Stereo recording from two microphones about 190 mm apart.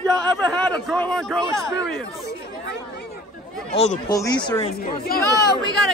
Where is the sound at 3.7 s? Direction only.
35° left (ahead or behind).